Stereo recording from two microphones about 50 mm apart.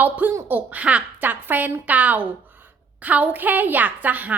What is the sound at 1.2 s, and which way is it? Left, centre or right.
A woman's voice, right.